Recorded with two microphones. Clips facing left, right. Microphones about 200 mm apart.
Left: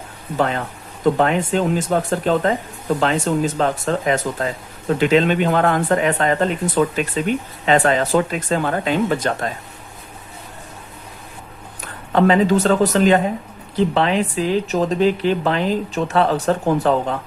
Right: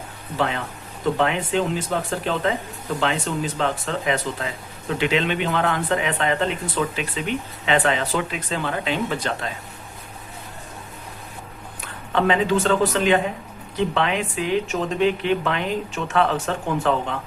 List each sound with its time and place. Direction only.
0.3 s speech: 45° left (ahead or behind)
11.8 s speech: 40° left (ahead or behind)